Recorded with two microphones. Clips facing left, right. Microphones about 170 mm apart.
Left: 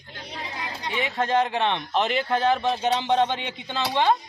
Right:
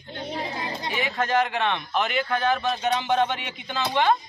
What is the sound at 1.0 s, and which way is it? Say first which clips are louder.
Speech: left 1 dB; 25° left (ahead or behind).